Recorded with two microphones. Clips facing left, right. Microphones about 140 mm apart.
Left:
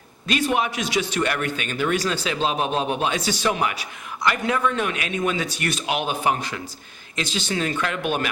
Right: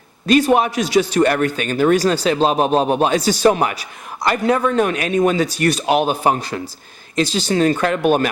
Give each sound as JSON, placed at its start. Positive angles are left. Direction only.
{"t": 0.3, "sound": "speech", "side_deg": -40}